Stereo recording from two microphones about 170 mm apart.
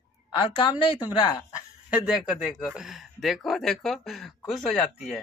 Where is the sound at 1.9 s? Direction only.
5° right (ahead or behind).